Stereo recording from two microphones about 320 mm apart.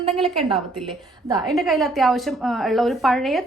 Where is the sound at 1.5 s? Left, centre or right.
Centre.